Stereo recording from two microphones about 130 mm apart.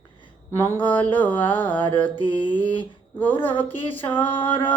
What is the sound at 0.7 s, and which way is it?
Mantra, 15° left (ahead or behind).